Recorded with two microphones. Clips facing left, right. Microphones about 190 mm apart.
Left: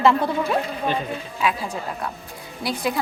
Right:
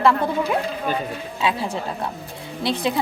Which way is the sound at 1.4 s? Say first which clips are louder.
Right 2 dB; 25° right (ahead or behind).